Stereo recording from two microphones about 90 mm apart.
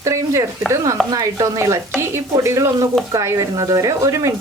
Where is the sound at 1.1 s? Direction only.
45° right (ahead or behind).